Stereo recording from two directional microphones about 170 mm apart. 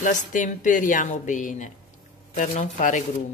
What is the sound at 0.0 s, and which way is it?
Speech, 50° left (ahead or behind).